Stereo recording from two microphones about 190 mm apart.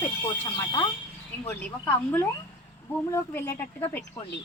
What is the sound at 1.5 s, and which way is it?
Speech, 10° left (ahead or behind).